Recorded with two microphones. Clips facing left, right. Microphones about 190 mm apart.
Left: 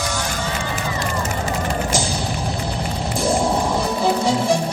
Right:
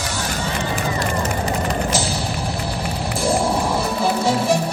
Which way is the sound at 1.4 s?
30° left (ahead or behind).